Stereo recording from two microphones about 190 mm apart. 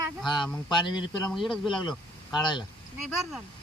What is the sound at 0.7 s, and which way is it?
Speech, 25° left (ahead or behind).